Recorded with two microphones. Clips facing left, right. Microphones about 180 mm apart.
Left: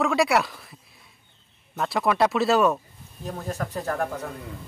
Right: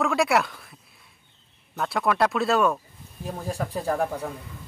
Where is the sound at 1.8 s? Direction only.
Centre (ahead or behind).